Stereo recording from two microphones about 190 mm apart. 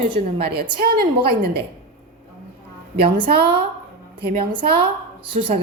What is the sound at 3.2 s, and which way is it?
Speech, 25° right (ahead or behind).